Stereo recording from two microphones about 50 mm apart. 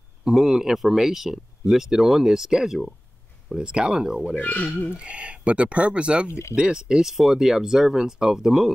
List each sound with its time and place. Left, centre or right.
0.3 s speech: centre
4.4 s speech: left
4.9 s speech: right